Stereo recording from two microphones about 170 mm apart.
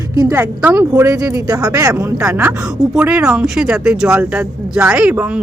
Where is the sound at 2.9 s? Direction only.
5° right (ahead or behind).